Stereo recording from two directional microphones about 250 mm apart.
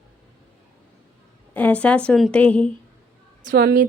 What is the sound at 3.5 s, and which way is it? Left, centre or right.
Speech, right.